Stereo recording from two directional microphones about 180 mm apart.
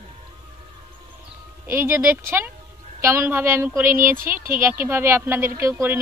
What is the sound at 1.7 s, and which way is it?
Speech, 15° right (ahead or behind).